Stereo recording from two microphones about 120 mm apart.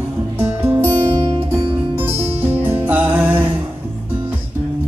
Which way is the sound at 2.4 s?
15° right (ahead or behind).